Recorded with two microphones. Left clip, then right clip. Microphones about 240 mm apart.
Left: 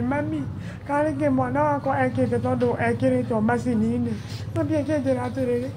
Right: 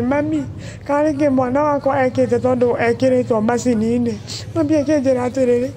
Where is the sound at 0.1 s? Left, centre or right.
Right.